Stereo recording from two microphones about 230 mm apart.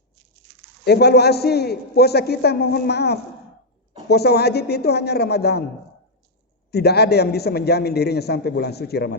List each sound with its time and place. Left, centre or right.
0.9 s a man's voice: left
6.7 s a man's voice: left